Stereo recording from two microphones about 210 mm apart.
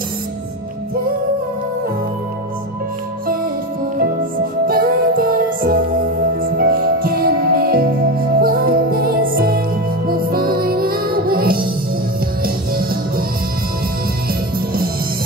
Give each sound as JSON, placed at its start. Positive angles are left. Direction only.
{"t": 4.6, "sound": "music", "side_deg": -45}